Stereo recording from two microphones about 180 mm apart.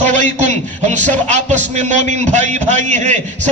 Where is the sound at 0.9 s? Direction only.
40° right (ahead or behind).